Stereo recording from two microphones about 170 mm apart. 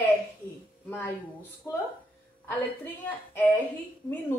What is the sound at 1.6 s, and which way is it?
A woman's voice, 15° left (ahead or behind).